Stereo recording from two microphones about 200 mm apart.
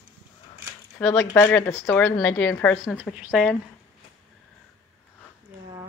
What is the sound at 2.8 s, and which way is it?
Speech, 5° right (ahead or behind).